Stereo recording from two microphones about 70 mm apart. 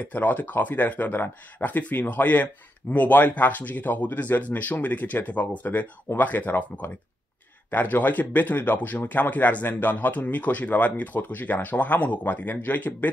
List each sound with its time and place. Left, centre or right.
0.0 s speech: left